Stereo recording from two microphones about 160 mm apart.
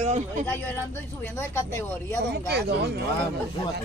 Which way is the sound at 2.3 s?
90° right.